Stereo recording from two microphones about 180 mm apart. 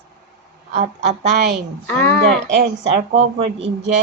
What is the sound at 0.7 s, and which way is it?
Speech, 40° right (ahead or behind).